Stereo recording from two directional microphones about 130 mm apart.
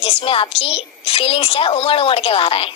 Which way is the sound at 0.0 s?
45° left (ahead or behind).